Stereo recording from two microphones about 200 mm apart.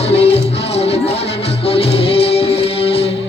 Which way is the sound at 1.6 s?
30° left (ahead or behind).